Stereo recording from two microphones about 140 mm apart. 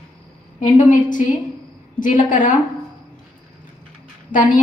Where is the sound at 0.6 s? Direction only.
60° left (ahead or behind).